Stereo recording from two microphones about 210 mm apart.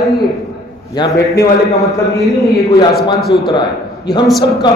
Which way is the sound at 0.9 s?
20° left (ahead or behind).